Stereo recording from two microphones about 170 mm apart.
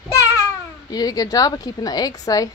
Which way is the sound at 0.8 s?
20° left (ahead or behind).